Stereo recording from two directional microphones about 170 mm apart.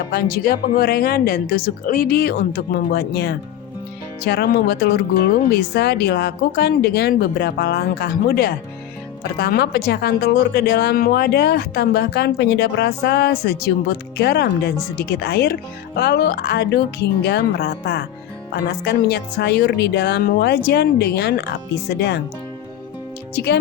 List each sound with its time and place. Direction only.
0.1 s speech: 65° left (ahead or behind)
14.8 s speech: 65° left (ahead or behind); by 22.2 s 80° left
23.3 s speech: 75° left (ahead or behind)